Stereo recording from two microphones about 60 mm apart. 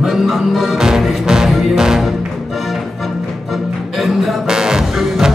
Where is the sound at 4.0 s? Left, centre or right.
Centre.